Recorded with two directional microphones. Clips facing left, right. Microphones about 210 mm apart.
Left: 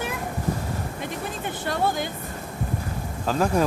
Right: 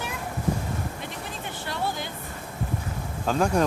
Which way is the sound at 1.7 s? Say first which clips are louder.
Left 6 dB; 50° left (ahead or behind).